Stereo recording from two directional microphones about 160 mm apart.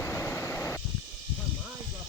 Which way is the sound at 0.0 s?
15° left (ahead or behind).